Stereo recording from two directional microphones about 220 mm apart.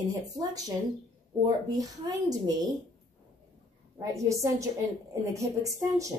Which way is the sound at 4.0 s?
15° right (ahead or behind).